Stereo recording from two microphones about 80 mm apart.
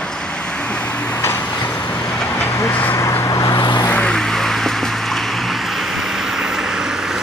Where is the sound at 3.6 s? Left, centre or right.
Left.